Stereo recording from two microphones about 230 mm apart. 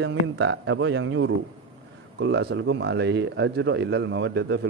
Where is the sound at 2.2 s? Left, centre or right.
Right.